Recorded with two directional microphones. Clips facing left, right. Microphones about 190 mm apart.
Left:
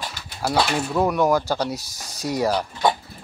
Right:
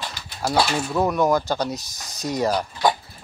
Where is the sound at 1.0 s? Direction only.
10° left (ahead or behind).